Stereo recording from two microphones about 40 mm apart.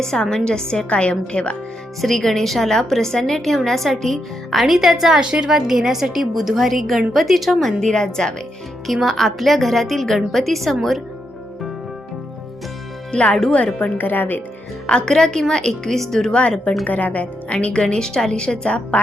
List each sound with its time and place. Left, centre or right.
0.0 s a woman's voice: centre
2.0 s a woman's voice: centre
5.2 s a woman's voice: centre
7.8 s a woman's voice: centre
8.9 s a woman's voice: centre
13.1 s a woman's voice: left
14.0 s speech: left
14.8 s speech: left
15.9 s a woman's voice: centre
16.3 s speech: left
16.8 s speech: left